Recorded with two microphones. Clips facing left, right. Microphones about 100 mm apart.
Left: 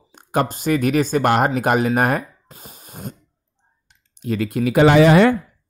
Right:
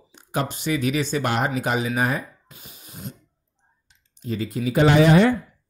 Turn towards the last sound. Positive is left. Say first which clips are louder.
# left 4 dB
turn(degrees=75)  # may be behind; listen again after turning